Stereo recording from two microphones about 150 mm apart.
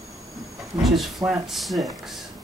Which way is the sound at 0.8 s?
Centre (ahead or behind).